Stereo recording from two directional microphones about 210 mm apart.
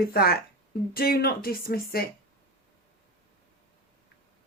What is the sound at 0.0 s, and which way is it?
Speech, 45° left (ahead or behind).